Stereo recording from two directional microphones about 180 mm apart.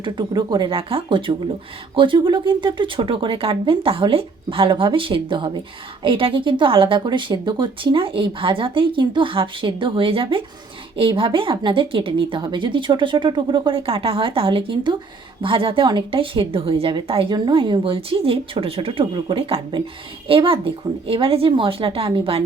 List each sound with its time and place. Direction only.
0.0 s a woman's voice: 25° right (ahead or behind)